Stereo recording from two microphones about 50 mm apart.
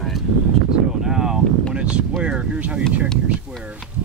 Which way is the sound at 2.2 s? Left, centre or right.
Right.